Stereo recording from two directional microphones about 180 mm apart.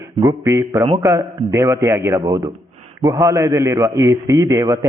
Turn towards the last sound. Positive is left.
turn(degrees=-15)  # may be behind; listen again after turning